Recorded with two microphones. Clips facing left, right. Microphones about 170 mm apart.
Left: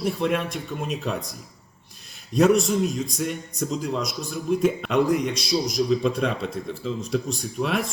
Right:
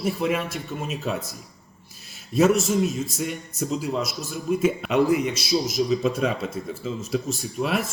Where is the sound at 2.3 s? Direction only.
5° right (ahead or behind).